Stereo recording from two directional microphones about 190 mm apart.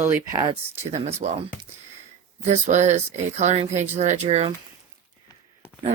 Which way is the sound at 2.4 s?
40° right (ahead or behind).